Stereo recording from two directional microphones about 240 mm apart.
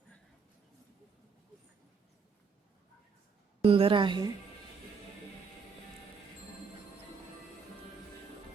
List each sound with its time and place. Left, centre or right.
3.6 s a woman's voice: right